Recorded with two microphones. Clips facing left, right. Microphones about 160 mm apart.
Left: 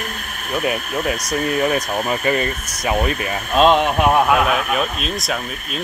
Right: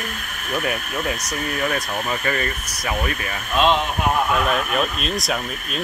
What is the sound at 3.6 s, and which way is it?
Speech, 40° left (ahead or behind).